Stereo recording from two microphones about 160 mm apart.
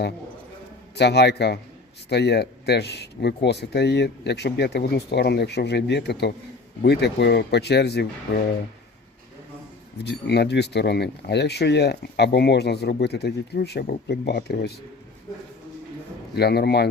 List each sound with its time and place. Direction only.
0.9 s speech: 90° left
10.0 s speech: 90° left
16.3 s speech: 90° left